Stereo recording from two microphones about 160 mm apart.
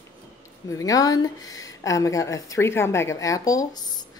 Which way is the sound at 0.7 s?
20° left (ahead or behind).